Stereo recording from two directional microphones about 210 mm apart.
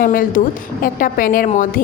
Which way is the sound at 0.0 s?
40° left (ahead or behind).